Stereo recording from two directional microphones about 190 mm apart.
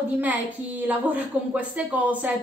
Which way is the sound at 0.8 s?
10° right (ahead or behind).